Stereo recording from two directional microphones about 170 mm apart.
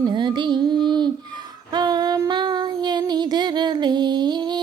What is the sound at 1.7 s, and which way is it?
Child singing, 25° right (ahead or behind).